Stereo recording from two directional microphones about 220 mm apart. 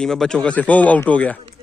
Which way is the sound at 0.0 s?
5° left (ahead or behind).